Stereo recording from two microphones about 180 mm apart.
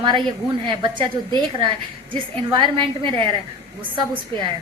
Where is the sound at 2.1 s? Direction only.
25° right (ahead or behind).